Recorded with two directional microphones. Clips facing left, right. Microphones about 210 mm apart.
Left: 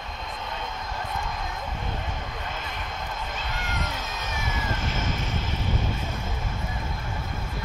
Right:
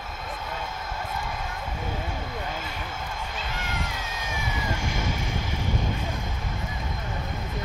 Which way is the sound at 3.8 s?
10° right (ahead or behind).